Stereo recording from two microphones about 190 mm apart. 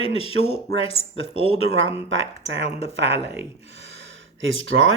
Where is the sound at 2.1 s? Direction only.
75° right (ahead or behind).